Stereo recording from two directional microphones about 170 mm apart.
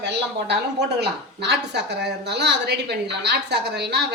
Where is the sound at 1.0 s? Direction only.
80° right.